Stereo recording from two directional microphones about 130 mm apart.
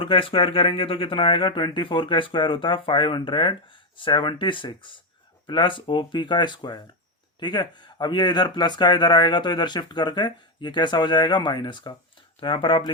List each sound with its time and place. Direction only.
0.0 s speech: 45° left (ahead or behind)